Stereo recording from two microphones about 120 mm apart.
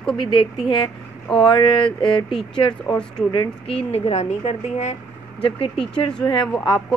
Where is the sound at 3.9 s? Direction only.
60° left (ahead or behind).